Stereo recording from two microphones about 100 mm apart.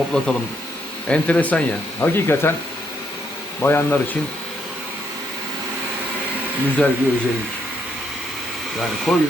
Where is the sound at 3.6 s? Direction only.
20° left (ahead or behind).